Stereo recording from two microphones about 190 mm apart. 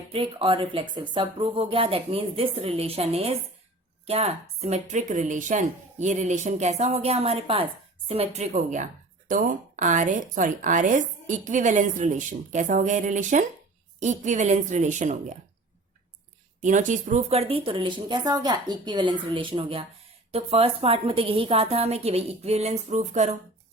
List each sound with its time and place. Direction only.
0.1 s speech: 30° right (ahead or behind)
16.6 s speech: 40° right (ahead or behind)